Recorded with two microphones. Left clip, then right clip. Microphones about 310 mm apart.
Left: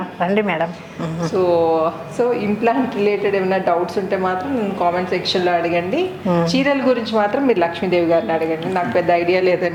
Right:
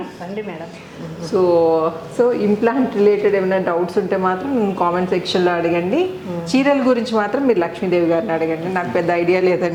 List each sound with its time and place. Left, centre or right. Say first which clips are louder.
0.2 s speech: left 13 dB; left
1.3 s a woman's voice: right 2 dB; right